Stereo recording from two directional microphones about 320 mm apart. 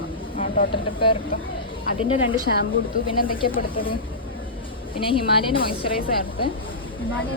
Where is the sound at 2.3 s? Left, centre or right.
Left.